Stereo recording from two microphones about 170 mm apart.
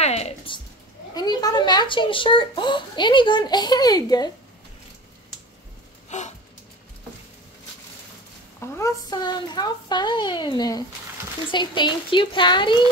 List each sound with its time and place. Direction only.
0.0 s music: 40° left (ahead or behind)
1.1 s a child's voice: 25° left (ahead or behind)
6.0 s a sound: 45° left (ahead or behind)
8.5 s a child's voice: 15° left (ahead or behind)